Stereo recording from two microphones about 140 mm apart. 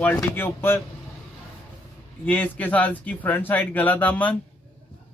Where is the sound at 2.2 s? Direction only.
10° left (ahead or behind).